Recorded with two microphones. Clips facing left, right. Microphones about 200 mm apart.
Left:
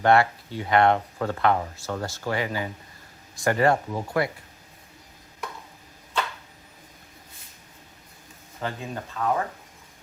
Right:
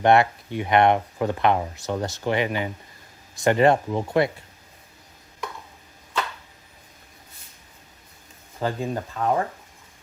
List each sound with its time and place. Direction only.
0.0 s speech: 20° right (ahead or behind)
8.6 s speech: 35° right (ahead or behind)